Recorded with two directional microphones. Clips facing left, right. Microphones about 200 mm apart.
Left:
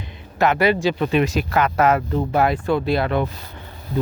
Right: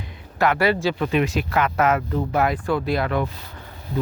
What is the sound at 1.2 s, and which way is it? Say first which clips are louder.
Speech: left 2 dB; 40° left (ahead or behind).